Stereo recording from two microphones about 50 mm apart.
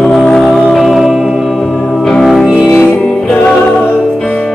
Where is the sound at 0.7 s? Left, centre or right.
Centre.